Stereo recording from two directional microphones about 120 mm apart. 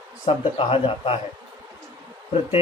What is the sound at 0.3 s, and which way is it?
Speech, 50° left (ahead or behind).